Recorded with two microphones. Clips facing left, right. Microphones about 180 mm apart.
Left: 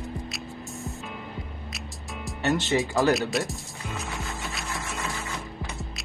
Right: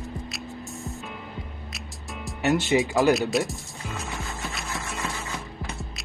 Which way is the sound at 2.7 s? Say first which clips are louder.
Right 3 dB; centre (ahead or behind).